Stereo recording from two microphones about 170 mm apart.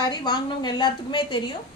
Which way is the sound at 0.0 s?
25° left (ahead or behind).